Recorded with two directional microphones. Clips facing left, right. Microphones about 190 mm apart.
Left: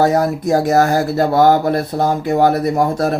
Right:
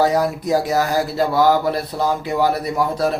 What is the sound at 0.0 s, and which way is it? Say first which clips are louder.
Speech: left 3 dB; 50° left (ahead or behind).